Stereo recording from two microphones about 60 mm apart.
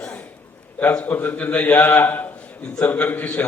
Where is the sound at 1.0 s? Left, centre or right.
Left.